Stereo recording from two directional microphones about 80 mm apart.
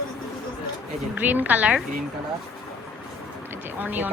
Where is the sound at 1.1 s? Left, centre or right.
Right.